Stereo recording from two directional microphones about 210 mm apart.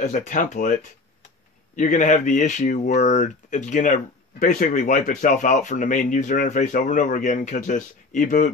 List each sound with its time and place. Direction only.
0.0 s speech: 35° left (ahead or behind)
1.8 s speech: 35° left (ahead or behind)